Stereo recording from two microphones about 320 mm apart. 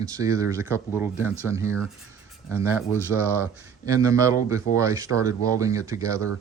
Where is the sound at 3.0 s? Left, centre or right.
Centre.